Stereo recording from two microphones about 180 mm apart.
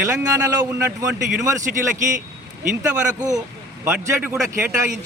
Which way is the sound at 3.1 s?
20° right (ahead or behind).